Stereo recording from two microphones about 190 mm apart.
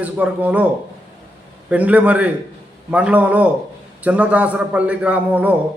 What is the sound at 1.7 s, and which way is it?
A man's voice, 10° right (ahead or behind).